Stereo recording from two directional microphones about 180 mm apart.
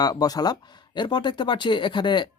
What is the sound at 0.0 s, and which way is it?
Speech, 20° left (ahead or behind).